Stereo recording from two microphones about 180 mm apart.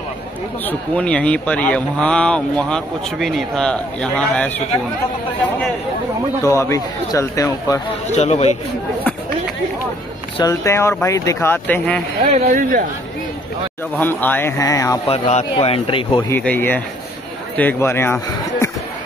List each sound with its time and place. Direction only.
0.7 s speech: 5° left (ahead or behind)
6.4 s speech: 15° left (ahead or behind)
8.1 s speech: 40° left (ahead or behind)
10.3 s speech: 20° left (ahead or behind)
12.3 s speech: 45° right (ahead or behind)
13.9 s speech: 10° left (ahead or behind)
15.0 s speech: 35° left (ahead or behind)
16.3 s speech: 10° left (ahead or behind)